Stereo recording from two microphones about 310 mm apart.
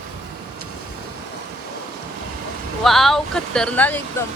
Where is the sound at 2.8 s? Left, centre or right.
Centre.